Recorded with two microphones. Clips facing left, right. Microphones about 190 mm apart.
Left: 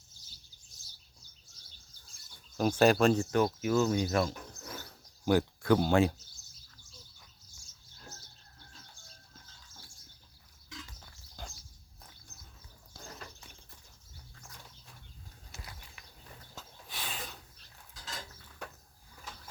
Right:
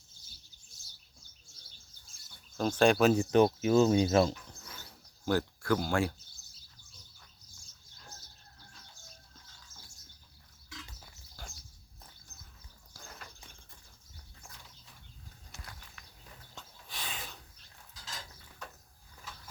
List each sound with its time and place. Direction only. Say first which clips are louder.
2.6 s speech: even; 10° left (ahead or behind)
3.2 s speech: right 4 dB; 20° right (ahead or behind)
5.2 s speech: left 3 dB; 15° left (ahead or behind)
15.5 s a sound: left 2 dB; centre (ahead or behind)
16.6 s snort: left 1 dB; centre (ahead or behind)